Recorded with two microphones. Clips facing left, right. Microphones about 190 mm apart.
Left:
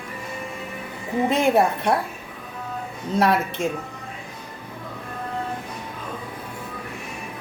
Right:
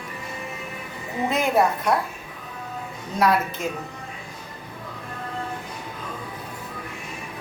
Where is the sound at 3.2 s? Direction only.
25° left (ahead or behind).